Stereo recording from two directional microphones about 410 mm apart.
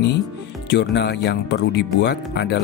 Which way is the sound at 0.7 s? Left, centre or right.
Left.